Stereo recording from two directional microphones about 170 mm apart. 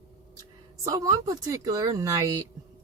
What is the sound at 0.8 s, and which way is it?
Speech, 20° right (ahead or behind).